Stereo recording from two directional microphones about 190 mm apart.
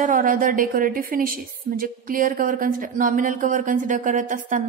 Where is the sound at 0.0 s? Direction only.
45° right (ahead or behind).